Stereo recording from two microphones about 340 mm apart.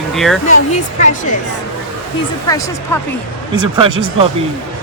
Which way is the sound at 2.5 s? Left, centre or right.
Centre.